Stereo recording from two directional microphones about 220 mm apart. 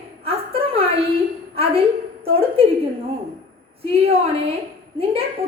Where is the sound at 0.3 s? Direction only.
25° right (ahead or behind).